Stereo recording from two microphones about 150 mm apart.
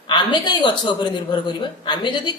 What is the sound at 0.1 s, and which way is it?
A woman's voice, 30° left (ahead or behind).